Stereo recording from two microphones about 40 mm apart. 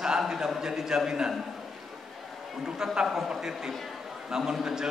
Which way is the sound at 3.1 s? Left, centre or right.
Centre.